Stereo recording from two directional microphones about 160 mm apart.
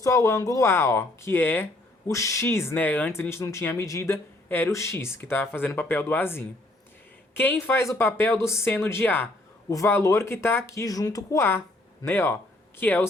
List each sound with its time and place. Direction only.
0.0 s a woman's voice: 20° left (ahead or behind)